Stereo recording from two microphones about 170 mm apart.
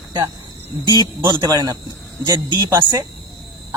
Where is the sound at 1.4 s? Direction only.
20° right (ahead or behind).